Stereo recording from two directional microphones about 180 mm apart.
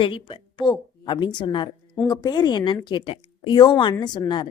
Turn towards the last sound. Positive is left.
turn(degrees=25)  # may be behind; listen again after turning